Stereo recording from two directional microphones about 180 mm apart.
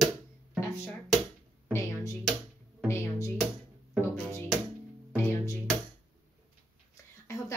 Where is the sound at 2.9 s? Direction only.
15° left (ahead or behind).